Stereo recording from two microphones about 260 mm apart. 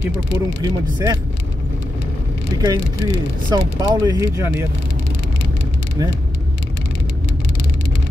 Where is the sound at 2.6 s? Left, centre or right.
Centre.